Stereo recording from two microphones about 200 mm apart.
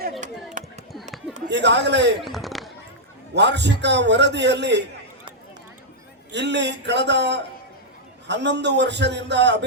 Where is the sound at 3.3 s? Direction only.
60° right (ahead or behind).